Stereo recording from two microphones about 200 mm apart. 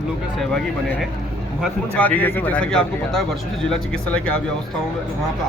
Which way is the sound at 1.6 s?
5° left (ahead or behind).